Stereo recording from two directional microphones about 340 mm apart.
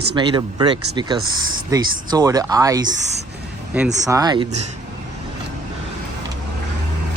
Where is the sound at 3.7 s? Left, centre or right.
Centre.